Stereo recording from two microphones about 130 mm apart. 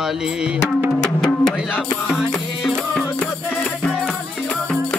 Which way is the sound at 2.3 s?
Centre (ahead or behind).